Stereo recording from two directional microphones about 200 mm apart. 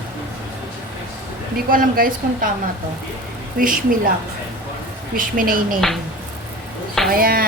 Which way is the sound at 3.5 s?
45° right (ahead or behind).